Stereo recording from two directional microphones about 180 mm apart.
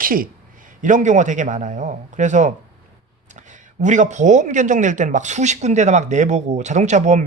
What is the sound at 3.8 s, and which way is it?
Speech, 45° right (ahead or behind).